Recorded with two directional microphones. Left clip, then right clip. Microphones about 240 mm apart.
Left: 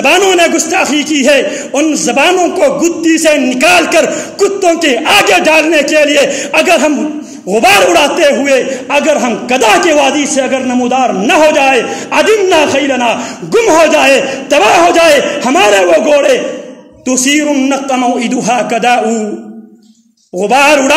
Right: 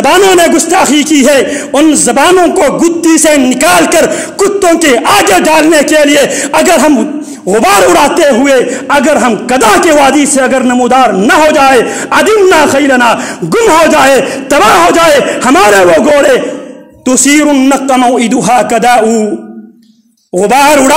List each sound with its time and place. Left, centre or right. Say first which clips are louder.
0.0 s a man's voice: right 3 dB; right
15.4 s a man's voice: right 5 dB; right
20.3 s a man's voice: right 2 dB; right